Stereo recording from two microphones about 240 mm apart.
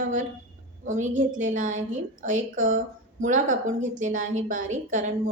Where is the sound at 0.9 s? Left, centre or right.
Right.